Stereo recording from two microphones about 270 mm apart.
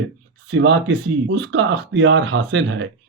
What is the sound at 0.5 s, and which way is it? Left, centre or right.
Speech, right.